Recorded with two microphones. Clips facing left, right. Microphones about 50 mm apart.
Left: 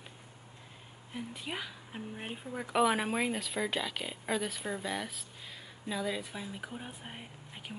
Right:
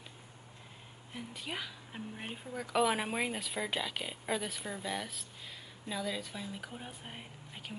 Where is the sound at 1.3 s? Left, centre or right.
Centre.